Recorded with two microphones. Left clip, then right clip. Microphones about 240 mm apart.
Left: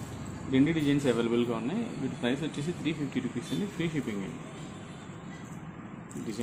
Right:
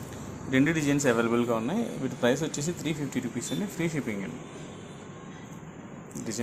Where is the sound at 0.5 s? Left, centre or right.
Centre.